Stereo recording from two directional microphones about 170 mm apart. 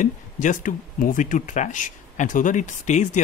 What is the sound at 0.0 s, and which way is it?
Speech, 50° left (ahead or behind).